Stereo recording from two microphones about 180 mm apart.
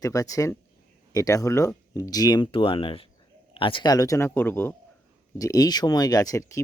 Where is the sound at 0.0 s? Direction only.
20° left (ahead or behind).